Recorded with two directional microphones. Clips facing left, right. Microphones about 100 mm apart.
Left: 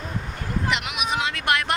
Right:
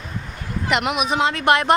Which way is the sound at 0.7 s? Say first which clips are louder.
Right 8 dB; 45° right (ahead or behind).